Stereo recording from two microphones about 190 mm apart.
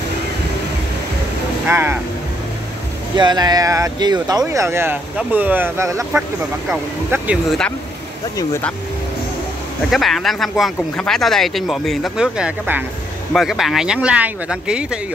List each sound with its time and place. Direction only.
1.7 s speech: 10° right (ahead or behind)
3.2 s speech: 20° right (ahead or behind)
8.4 s speech: 10° left (ahead or behind)
9.8 s speech: centre (ahead or behind)